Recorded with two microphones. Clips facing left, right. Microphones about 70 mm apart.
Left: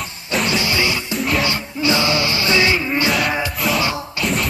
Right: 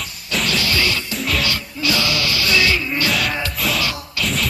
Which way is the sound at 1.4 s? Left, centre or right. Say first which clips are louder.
Left 3 dB; left.